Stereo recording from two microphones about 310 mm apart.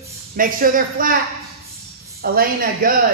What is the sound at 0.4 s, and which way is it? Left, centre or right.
Speech, right.